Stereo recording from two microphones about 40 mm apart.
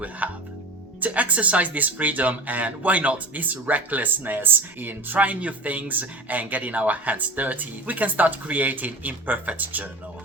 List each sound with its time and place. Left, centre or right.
0.2 s music: right
1.0 s speech: right